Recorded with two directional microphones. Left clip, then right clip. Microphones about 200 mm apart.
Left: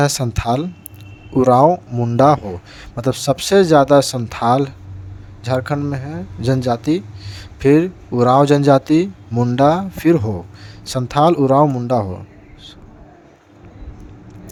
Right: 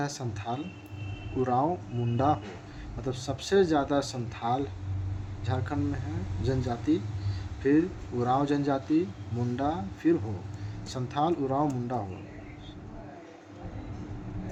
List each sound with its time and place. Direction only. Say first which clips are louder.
0.0 s speech: left 16 dB; 60° left (ahead or behind)